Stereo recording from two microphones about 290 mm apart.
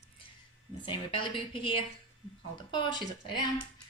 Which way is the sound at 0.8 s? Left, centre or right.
Centre.